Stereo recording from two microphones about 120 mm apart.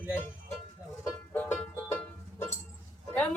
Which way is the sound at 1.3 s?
10° left (ahead or behind).